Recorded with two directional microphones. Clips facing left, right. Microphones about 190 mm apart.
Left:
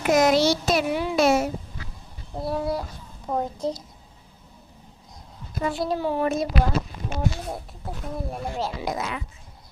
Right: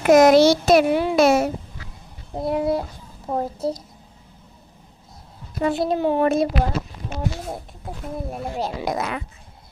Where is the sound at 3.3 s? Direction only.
5° right (ahead or behind).